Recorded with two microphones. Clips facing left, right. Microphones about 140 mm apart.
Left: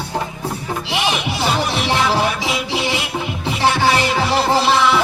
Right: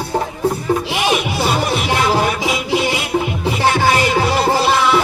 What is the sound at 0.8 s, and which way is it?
Music, 45° right (ahead or behind).